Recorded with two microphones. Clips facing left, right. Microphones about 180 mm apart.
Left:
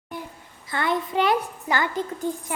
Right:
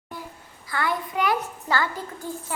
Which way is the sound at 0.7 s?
20° left (ahead or behind).